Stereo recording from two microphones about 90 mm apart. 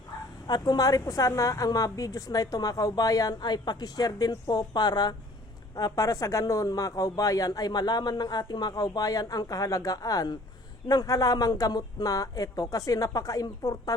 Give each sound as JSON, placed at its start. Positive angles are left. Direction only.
{"t": 0.4, "sound": "a woman's voice", "side_deg": 50}